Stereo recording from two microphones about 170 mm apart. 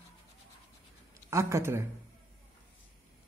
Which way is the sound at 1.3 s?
15° right (ahead or behind).